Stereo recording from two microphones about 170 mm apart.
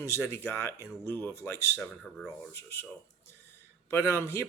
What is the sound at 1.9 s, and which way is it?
Speech, centre (ahead or behind).